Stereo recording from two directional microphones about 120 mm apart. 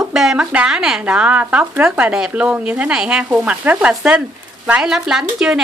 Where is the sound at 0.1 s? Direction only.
5° right (ahead or behind).